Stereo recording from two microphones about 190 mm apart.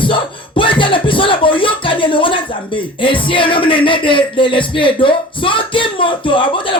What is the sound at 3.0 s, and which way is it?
Speech, 25° left (ahead or behind).